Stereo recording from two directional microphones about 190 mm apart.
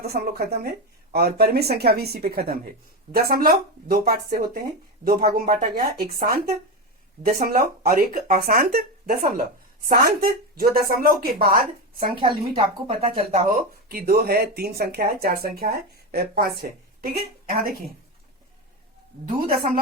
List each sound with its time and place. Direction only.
0.0 s speech: 55° right (ahead or behind)
12.1 s a woman's voice: 25° right (ahead or behind)
13.3 s speech: 50° right (ahead or behind)
19.5 s speech: 50° right (ahead or behind)